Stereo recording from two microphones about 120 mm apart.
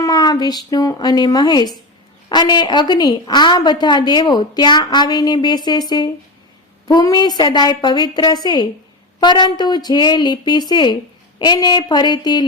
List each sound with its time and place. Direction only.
0.0 s a woman's voice: 30° left (ahead or behind)